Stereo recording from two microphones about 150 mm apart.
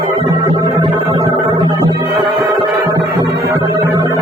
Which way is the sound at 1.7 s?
30° right (ahead or behind).